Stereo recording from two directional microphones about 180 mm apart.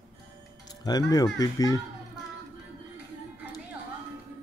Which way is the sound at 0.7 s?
20° left (ahead or behind).